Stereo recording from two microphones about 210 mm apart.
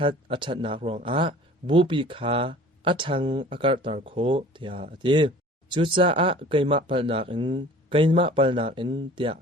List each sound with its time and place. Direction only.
0.0 s speech: 25° right (ahead or behind)